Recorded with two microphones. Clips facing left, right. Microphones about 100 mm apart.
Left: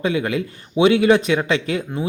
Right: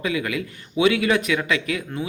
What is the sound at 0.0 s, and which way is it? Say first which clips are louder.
A man's voice: left 4 dB; 30° left (ahead or behind).